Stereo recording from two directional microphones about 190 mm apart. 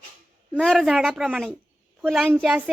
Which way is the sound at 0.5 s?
Centre (ahead or behind).